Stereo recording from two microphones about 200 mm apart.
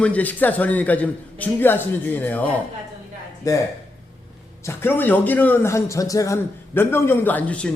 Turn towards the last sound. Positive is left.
turn(degrees=5)  # may be behind; listen again after turning